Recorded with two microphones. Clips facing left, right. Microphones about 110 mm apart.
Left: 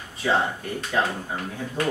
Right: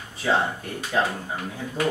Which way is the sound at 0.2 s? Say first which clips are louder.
Even; centre (ahead or behind).